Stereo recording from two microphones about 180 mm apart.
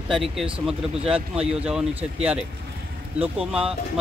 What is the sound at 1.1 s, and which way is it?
Speech, 30° right (ahead or behind).